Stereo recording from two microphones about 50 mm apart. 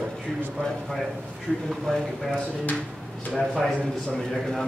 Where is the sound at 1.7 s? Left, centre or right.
Centre.